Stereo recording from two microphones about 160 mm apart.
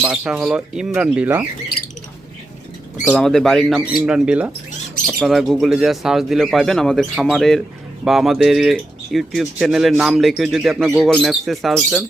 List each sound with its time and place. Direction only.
0.0 s speech: 5° right (ahead or behind)
3.0 s speech: 5° left (ahead or behind)